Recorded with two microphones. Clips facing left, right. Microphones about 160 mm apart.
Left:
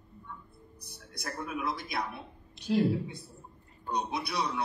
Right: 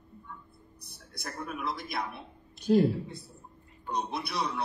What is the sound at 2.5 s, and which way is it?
Speech, 45° right (ahead or behind).